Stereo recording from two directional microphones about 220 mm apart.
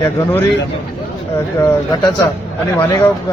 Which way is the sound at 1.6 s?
15° left (ahead or behind).